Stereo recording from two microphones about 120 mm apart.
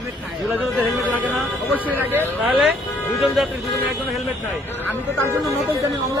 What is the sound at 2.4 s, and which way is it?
Speech, centre (ahead or behind).